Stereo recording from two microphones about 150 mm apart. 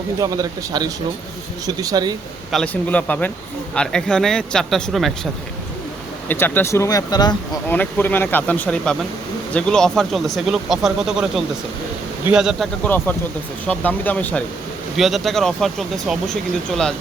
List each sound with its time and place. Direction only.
0.2 s speech: 25° right (ahead or behind)
2.5 s speech: 5° left (ahead or behind)
6.2 s speech: 15° left (ahead or behind)
7.7 s speech: 10° left (ahead or behind); by 12.6 s 5° right (ahead or behind)
12.8 s speech: 10° left (ahead or behind)
14.9 s speech: centre (ahead or behind)